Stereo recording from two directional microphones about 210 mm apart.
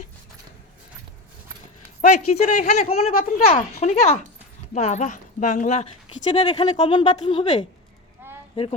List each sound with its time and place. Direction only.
2.0 s speech: 35° left (ahead or behind)
3.1 s speech: 40° left (ahead or behind)
3.4 s speech: 30° left (ahead or behind)
6.3 s speech: 25° left (ahead or behind)